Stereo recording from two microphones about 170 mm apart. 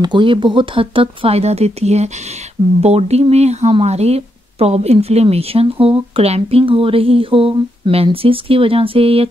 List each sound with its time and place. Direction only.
0.0 s speech: 30° right (ahead or behind)